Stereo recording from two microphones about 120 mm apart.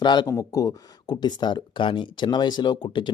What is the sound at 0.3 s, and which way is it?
Speech, 25° left (ahead or behind).